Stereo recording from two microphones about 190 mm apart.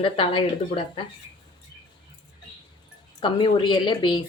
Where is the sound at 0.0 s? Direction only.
25° left (ahead or behind).